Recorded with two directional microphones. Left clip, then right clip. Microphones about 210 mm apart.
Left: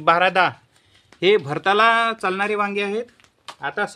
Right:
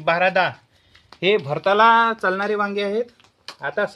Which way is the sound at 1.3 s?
40° left (ahead or behind).